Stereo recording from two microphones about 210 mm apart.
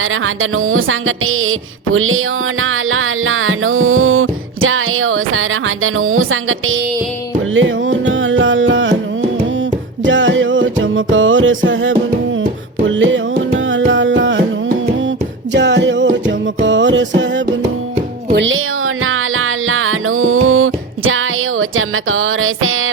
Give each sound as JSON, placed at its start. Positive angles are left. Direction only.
{"t": 0.0, "sound": "music", "side_deg": -75}
{"t": 10.0, "sound": "music", "side_deg": -60}
{"t": 15.5, "sound": "music", "side_deg": -60}
{"t": 19.0, "sound": "music", "side_deg": -75}